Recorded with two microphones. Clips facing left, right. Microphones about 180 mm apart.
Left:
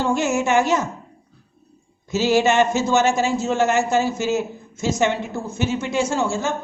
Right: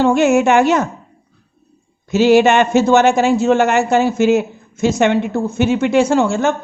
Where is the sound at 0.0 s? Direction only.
65° right (ahead or behind).